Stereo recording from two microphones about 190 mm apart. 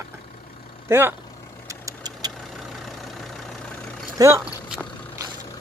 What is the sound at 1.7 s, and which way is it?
Vehicle, 20° right (ahead or behind).